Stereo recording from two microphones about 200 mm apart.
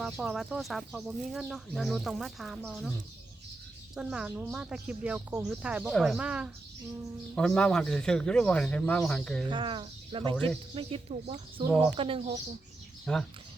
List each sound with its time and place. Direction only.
0.0 s speech: centre (ahead or behind)
3.9 s speech: 5° right (ahead or behind)
9.5 s speech: 25° right (ahead or behind)
10.3 s speech: 5° left (ahead or behind)
10.8 s speech: 30° right (ahead or behind)
13.1 s speech: 5° left (ahead or behind)